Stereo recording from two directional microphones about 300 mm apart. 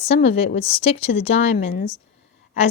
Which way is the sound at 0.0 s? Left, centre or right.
Centre.